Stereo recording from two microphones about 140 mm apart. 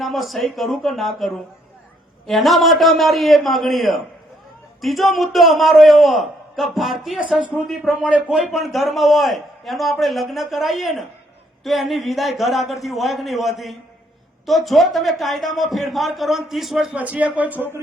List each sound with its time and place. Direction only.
0.0 s a man's voice: centre (ahead or behind)